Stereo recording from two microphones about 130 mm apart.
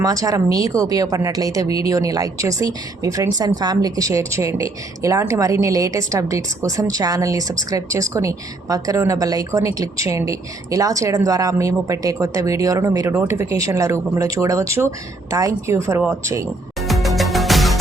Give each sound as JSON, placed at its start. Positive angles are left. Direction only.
{"t": 0.0, "sound": "a woman's voice", "side_deg": -25}
{"t": 16.9, "sound": "music", "side_deg": 0}